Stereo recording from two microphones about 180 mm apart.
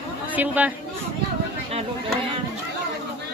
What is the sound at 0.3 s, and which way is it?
Speech, 10° right (ahead or behind).